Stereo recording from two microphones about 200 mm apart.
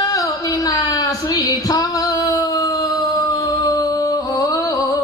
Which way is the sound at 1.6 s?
20° left (ahead or behind).